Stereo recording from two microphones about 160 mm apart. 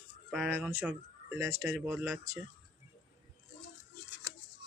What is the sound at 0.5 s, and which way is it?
Speech, 10° right (ahead or behind).